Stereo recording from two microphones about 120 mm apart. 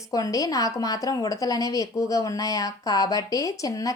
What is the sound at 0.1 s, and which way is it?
A woman's voice, 30° left (ahead or behind).